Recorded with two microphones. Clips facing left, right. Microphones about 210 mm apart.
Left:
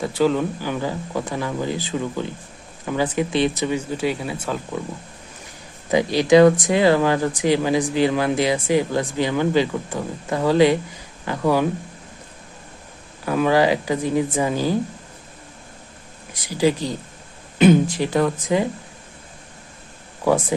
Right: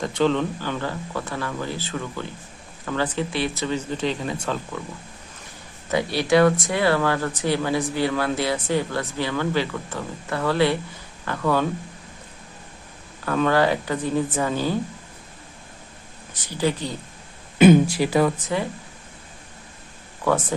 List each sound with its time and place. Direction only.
0.0 s speech: 5° left (ahead or behind)
6.1 s speech: 15° left (ahead or behind)
13.2 s speech: 10° left (ahead or behind)
16.3 s speech: 10° left (ahead or behind)
17.6 s speech: 10° right (ahead or behind)
20.2 s speech: 10° left (ahead or behind)